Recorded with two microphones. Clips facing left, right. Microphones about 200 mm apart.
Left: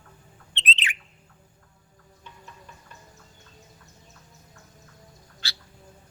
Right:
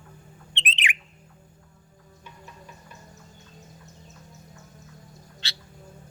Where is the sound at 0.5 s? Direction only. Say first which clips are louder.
Even; 15° right (ahead or behind).